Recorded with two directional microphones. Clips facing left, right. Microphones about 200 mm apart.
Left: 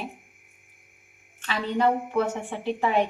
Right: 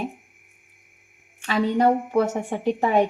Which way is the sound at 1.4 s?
45° right (ahead or behind).